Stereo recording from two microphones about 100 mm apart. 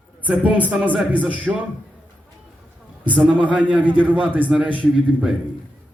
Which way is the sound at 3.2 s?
10° right (ahead or behind).